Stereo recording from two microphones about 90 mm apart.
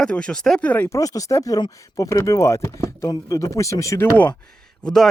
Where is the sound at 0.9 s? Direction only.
40° left (ahead or behind).